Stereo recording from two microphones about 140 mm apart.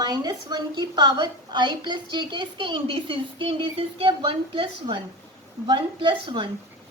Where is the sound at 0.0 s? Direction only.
30° right (ahead or behind).